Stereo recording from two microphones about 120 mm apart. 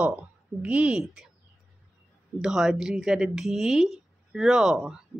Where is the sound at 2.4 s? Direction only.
5° right (ahead or behind).